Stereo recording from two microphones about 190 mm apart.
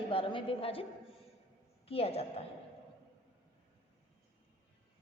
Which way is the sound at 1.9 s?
30° left (ahead or behind).